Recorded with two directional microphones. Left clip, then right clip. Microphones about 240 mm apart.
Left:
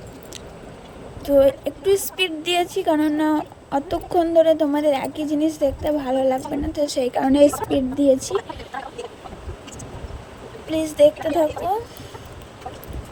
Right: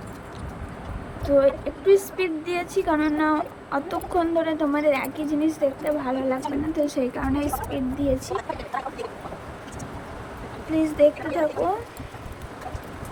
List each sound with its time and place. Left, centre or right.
1.2 s a woman's voice: left
10.7 s a woman's voice: left